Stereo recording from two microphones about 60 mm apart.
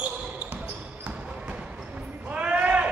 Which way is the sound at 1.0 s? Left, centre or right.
Right.